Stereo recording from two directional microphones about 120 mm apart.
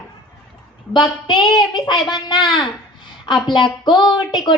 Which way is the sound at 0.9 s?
40° left (ahead or behind).